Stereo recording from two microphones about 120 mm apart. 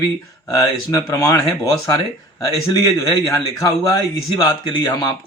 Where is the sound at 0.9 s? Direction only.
30° left (ahead or behind).